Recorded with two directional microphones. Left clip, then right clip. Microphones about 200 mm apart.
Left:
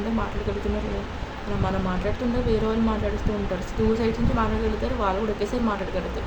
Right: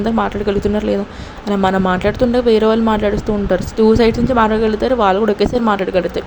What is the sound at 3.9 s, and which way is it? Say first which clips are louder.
A woman's voice: right 12 dB; 40° right (ahead or behind).